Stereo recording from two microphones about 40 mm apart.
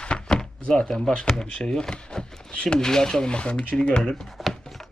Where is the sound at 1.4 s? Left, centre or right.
Centre.